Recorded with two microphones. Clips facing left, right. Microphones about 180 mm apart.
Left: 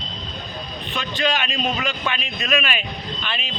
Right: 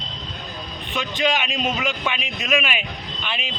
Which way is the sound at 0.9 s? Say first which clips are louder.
Right 1 dB; 15° right (ahead or behind).